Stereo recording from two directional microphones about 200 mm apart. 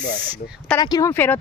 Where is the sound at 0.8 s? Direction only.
20° left (ahead or behind).